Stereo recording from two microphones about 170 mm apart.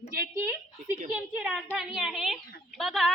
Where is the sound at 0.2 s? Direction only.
15° right (ahead or behind).